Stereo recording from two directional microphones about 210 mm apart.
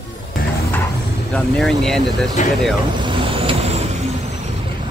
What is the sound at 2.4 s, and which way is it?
Speech, 35° left (ahead or behind).